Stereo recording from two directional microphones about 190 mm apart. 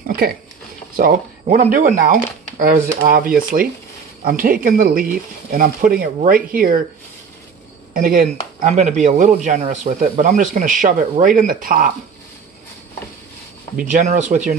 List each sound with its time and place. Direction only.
0.0 s speech: 50° right (ahead or behind)
7.9 s speech: 45° right (ahead or behind)
13.7 s speech: 45° right (ahead or behind)